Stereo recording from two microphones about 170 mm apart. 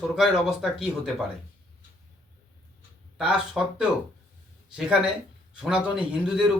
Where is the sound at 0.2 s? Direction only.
5° right (ahead or behind).